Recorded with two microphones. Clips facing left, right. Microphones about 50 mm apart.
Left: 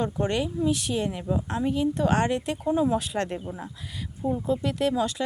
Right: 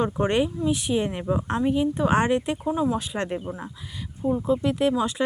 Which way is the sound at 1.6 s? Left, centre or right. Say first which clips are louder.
Right 1 dB; centre.